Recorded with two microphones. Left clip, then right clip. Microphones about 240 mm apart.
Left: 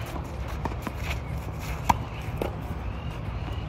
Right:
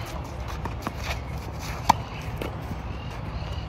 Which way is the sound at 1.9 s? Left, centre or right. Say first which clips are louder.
Right 3 dB; centre.